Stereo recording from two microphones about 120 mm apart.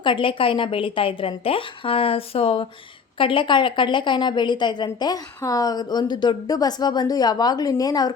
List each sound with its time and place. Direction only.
0.0 s a woman's voice: 45° left (ahead or behind)